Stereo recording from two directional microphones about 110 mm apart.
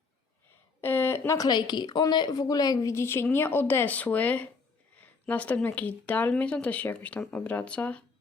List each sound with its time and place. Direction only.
0.8 s speech: 20° left (ahead or behind)
1.4 s a woman's voice: 40° left (ahead or behind)
2.9 s speech: 25° left (ahead or behind)
4.9 s a sound: 15° left (ahead or behind)
5.6 s speech: 15° left (ahead or behind)